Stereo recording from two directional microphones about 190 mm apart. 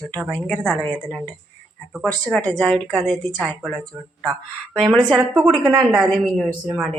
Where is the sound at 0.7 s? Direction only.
10° left (ahead or behind).